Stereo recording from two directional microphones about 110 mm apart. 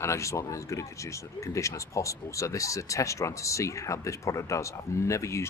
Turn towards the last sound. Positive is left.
turn(degrees=25)  # may be behind; listen again after turning